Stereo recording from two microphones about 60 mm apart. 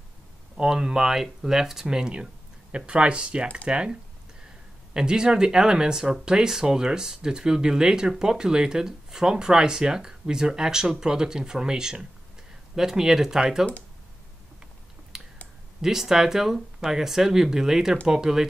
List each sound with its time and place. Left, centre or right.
0.6 s speech: centre
4.9 s speech: centre
15.1 s clicking: centre
15.8 s speech: centre